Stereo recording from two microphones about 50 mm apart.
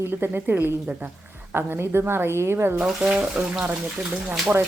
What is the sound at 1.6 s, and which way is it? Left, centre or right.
A woman's voice, right.